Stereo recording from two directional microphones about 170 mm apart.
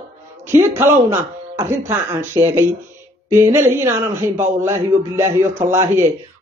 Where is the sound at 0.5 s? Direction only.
15° right (ahead or behind).